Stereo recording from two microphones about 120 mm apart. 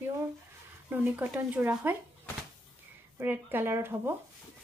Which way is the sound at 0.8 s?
15° right (ahead or behind).